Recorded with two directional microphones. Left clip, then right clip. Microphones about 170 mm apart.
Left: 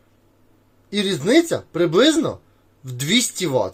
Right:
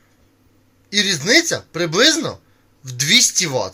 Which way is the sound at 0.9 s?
15° left (ahead or behind).